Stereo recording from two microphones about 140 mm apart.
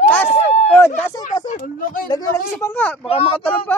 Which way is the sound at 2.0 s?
25° left (ahead or behind).